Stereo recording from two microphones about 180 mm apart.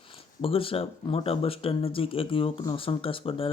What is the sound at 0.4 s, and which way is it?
Speech, 30° left (ahead or behind).